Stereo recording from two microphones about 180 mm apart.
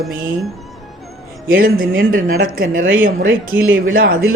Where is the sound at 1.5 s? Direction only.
50° right (ahead or behind).